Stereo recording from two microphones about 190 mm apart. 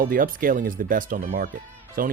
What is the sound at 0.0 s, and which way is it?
Speech, 50° right (ahead or behind).